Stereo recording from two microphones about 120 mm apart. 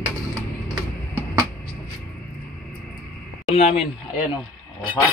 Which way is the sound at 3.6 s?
60° left (ahead or behind).